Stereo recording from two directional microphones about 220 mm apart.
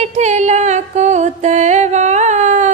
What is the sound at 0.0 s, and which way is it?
Music, 30° right (ahead or behind).